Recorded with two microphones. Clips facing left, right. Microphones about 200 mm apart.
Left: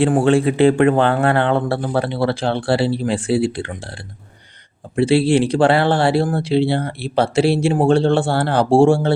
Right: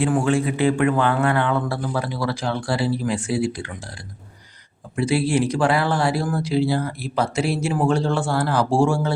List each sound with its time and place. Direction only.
0.0 s speech: 30° left (ahead or behind)